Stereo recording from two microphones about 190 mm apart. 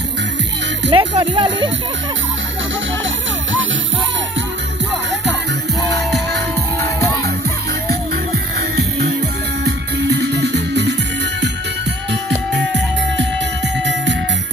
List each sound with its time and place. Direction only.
0.9 s speech: 25° right (ahead or behind)
9.7 s music: 65° right (ahead or behind)
12.5 s music: 65° right (ahead or behind)